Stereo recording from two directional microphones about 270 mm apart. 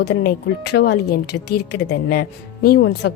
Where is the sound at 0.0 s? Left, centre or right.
Left.